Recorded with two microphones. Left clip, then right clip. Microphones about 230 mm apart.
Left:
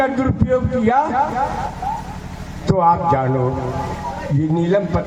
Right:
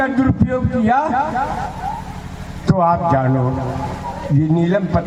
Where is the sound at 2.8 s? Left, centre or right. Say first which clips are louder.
Even; right.